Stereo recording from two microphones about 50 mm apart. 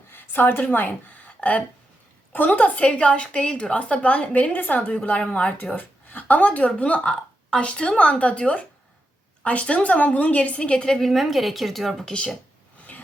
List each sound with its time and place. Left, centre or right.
0.1 s a woman's voice: left
5.7 s a woman's voice: left; by 12.0 s centre
12.0 s a woman's voice: centre